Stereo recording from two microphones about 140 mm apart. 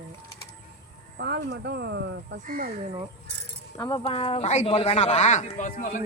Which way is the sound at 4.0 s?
45° left (ahead or behind).